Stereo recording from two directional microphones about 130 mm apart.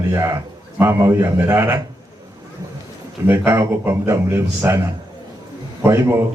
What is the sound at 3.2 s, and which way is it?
A man's voice, 15° right (ahead or behind).